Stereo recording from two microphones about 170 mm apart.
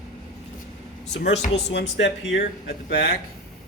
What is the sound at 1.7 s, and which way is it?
Speech, 90° left.